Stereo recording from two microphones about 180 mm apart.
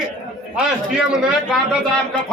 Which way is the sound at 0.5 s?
5° right (ahead or behind).